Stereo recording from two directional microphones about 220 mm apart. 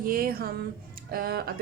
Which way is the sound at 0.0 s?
40° right (ahead or behind).